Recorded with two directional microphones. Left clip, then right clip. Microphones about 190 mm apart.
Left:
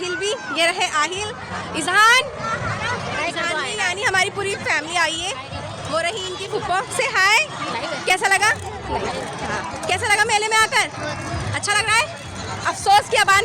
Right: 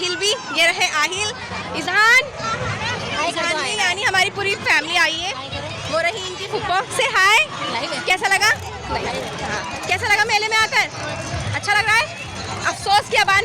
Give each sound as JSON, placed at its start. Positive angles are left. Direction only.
{"t": 0.2, "sound": "a woman's voice", "side_deg": 15}
{"t": 3.2, "sound": "a sound", "side_deg": -20}
{"t": 3.7, "sound": "vehicle", "side_deg": -5}
{"t": 4.0, "sound": "speech", "side_deg": 15}
{"t": 8.0, "sound": "speech", "side_deg": 25}
{"t": 9.8, "sound": "speech", "side_deg": 20}